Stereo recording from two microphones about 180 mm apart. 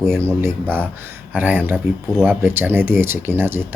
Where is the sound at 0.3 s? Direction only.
15° right (ahead or behind).